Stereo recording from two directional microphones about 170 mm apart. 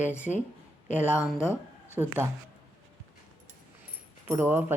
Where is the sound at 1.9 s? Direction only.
15° right (ahead or behind).